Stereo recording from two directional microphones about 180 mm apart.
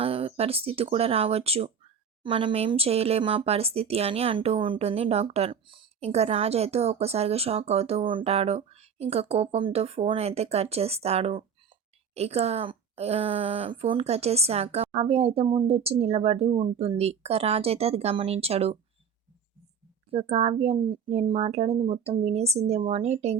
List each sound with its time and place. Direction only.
0.0 s speech: 30° right (ahead or behind)
20.1 s speech: 35° right (ahead or behind)